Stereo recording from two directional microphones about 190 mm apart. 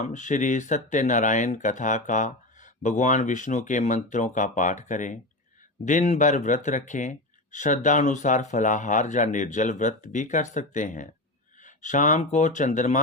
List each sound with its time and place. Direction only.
0.0 s speech: 40° left (ahead or behind)